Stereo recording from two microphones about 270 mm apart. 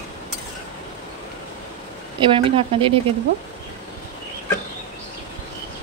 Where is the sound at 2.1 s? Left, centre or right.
Centre.